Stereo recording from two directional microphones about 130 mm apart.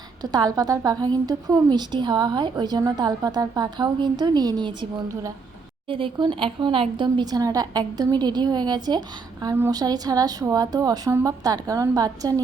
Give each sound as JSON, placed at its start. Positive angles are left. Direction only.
{"t": 0.2, "sound": "a woman's voice", "side_deg": -30}
{"t": 5.9, "sound": "a woman's voice", "side_deg": -40}